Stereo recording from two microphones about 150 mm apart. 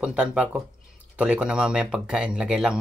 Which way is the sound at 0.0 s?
5° right (ahead or behind).